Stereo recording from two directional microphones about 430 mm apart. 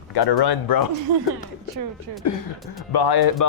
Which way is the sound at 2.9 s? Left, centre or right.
Left.